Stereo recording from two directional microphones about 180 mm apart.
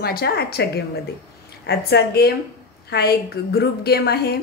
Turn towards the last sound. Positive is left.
turn(degrees=65)  # may be behind; listen again after turning